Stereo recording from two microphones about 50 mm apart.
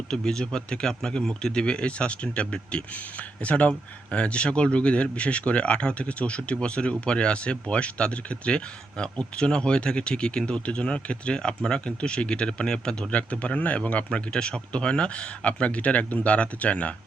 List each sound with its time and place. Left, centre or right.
0.1 s speech: centre